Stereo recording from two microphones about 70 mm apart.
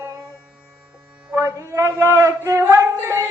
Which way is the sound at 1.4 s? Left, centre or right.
Right.